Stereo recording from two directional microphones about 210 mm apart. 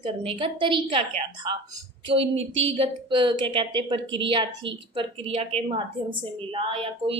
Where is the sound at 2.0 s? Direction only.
25° right (ahead or behind).